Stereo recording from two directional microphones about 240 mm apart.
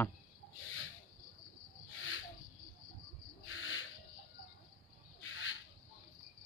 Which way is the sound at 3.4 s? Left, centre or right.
Left.